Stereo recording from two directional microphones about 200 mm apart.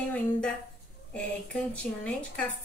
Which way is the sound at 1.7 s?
5° left (ahead or behind).